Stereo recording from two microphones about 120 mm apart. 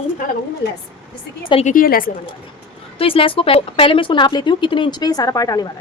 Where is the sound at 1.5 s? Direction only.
50° left (ahead or behind).